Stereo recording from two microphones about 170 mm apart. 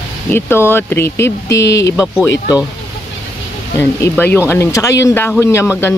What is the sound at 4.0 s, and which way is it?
A man's voice, 15° left (ahead or behind).